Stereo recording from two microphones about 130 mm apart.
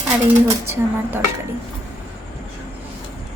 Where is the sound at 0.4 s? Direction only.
20° right (ahead or behind).